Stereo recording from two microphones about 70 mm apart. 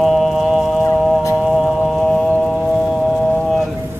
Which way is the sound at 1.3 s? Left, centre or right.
Centre.